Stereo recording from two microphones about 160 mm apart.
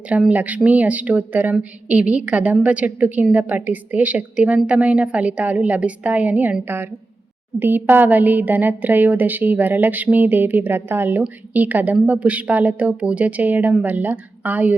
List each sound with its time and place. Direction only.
0.1 s a woman's voice: 10° right (ahead or behind)